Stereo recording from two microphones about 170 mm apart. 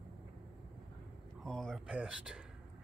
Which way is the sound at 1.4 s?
Centre (ahead or behind).